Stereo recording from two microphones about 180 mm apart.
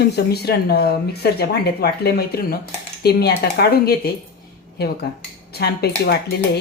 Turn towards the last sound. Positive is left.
turn(degrees=65)  # may be behind; listen again after turning